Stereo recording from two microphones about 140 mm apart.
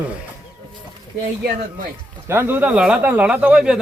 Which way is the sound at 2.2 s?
15° right (ahead or behind).